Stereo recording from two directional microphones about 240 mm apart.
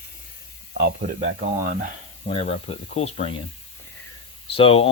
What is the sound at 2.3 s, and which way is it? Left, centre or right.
Speech, left.